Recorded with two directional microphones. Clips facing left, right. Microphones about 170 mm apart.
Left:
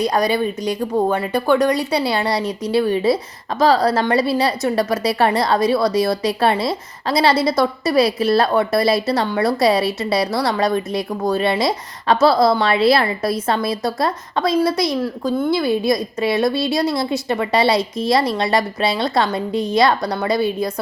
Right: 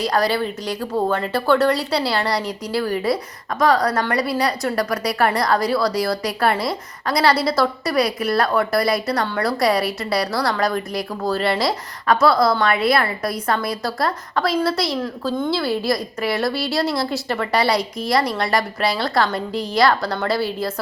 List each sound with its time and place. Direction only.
0.0 s a woman's voice: 20° left (ahead or behind)